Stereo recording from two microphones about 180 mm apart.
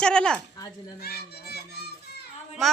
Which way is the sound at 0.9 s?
60° left (ahead or behind).